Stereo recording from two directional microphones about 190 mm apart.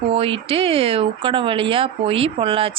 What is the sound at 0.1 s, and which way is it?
Speech, 30° right (ahead or behind).